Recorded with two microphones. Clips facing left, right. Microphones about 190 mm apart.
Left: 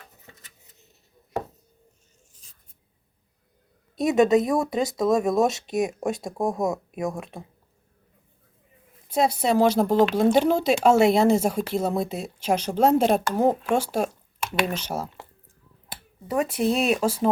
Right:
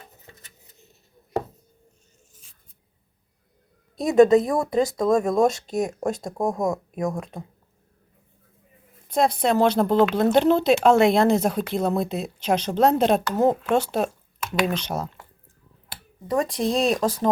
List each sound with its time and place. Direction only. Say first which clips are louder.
4.0 s speech: right 3 dB; 20° left (ahead or behind)
6.3 s speech: right 1 dB; 5° left (ahead or behind)
9.0 s speech: right 1 dB; 5° left (ahead or behind)
16.2 s speech: even; 10° left (ahead or behind)